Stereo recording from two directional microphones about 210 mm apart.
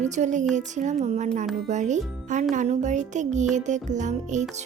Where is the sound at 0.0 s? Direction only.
35° right (ahead or behind).